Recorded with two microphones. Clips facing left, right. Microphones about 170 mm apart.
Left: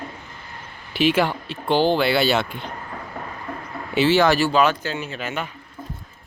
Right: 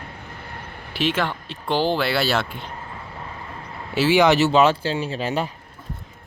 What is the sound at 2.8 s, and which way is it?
Vehicle, 25° right (ahead or behind).